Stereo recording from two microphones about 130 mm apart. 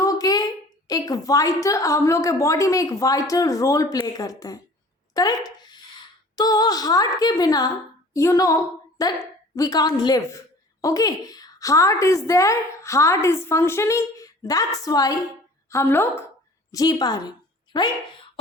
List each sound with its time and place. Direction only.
0.0 s a woman's voice: 30° left (ahead or behind)
6.3 s a sound: 30° left (ahead or behind)
7.2 s a woman's voice: 30° left (ahead or behind)
16.7 s speech: 30° left (ahead or behind)